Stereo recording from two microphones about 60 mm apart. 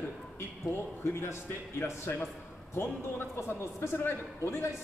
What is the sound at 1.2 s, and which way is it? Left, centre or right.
A man's voice, left.